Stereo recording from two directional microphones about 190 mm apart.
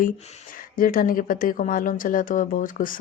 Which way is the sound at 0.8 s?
50° left (ahead or behind).